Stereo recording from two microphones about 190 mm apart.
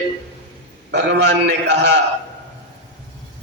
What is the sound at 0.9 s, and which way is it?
A man's voice, 65° right (ahead or behind).